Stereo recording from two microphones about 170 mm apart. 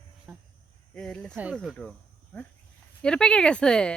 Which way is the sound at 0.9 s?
5° left (ahead or behind).